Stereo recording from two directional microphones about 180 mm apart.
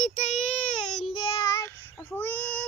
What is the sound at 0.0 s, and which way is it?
Child singing, 40° left (ahead or behind).